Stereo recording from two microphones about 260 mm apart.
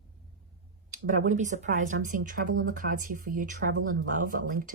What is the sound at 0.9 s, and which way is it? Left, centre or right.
Speech, right.